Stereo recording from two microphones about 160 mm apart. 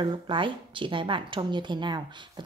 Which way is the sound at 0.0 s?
30° right (ahead or behind).